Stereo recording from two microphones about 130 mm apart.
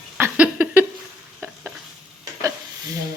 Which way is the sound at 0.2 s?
10° right (ahead or behind).